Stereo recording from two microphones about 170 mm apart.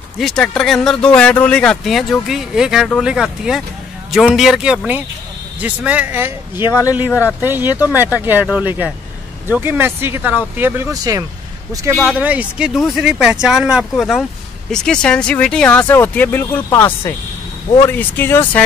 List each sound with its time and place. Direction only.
0.2 s speech: 5° left (ahead or behind); by 6.6 s 15° right (ahead or behind)
6.6 s speech: 20° left (ahead or behind)
7.4 s speech: 10° right (ahead or behind)
11.9 s speech: 5° left (ahead or behind)
12.2 s speech: 10° right (ahead or behind); by 18.4 s 10° left (ahead or behind)